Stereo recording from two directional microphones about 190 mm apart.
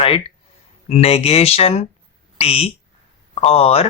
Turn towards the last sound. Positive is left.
turn(degrees=30)  # may be behind; listen again after turning